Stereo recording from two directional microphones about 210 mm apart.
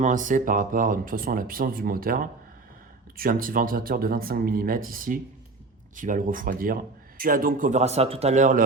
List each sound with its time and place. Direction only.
0.0 s speech: 35° right (ahead or behind)